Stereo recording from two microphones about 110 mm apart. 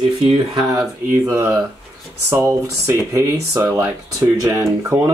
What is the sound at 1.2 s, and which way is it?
Speech, 25° right (ahead or behind).